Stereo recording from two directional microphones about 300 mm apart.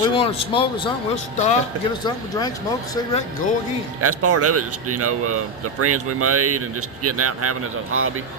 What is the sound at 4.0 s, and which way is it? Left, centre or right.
A man's voice, right.